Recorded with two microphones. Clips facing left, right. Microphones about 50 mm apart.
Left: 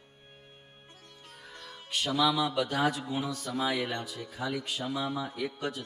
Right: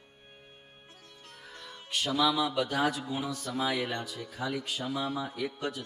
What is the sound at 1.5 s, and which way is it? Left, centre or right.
A man's voice, centre.